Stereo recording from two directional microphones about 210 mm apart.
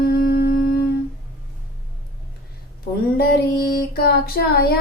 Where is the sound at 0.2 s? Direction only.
50° left (ahead or behind).